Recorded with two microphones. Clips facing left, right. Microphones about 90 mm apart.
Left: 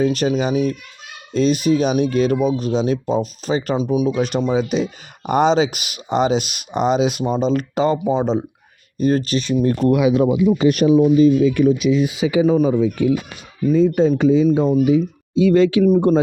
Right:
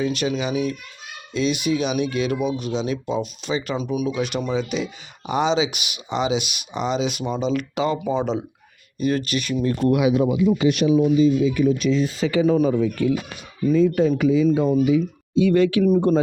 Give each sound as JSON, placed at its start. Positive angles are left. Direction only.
{"t": 0.0, "sound": "speech", "side_deg": 40}
{"t": 10.6, "sound": "speech", "side_deg": 45}
{"t": 11.2, "sound": "speech", "side_deg": 55}
{"t": 11.8, "sound": "speech", "side_deg": 10}